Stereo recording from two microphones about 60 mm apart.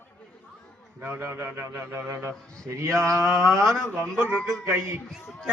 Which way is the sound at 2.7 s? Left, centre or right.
Right.